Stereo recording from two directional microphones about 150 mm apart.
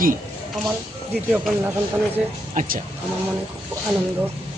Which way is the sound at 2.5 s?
55° right (ahead or behind).